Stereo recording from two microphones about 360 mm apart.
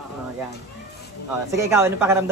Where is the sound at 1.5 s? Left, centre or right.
Centre.